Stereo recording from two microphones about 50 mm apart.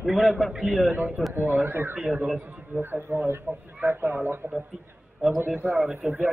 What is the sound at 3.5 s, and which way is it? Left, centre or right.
A man's voice, right.